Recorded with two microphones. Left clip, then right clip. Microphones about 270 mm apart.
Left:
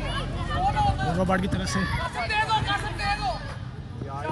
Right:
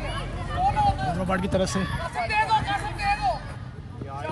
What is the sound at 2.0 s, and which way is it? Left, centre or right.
Vehicle, right.